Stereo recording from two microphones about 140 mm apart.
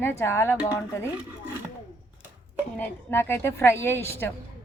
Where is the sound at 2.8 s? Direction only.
15° left (ahead or behind).